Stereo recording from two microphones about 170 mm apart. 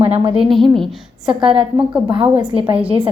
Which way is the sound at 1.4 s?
30° right (ahead or behind).